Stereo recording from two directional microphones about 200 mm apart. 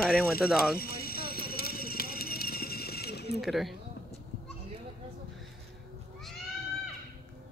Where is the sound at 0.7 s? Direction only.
50° left (ahead or behind).